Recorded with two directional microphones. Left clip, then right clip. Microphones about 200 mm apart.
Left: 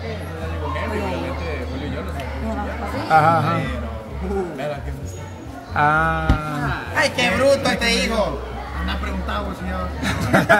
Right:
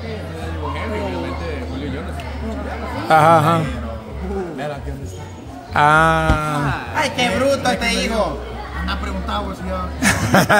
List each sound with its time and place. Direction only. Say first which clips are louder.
3.1 s speech: right 4 dB; 35° right (ahead or behind)
5.7 s a sound: right 5 dB; 35° right (ahead or behind)
7.0 s speech: left 1 dB; 10° left (ahead or behind)
10.0 s speech: right 4 dB; 35° right (ahead or behind)